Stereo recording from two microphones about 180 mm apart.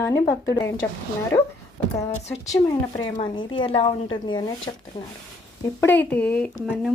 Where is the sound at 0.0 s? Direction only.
15° left (ahead or behind).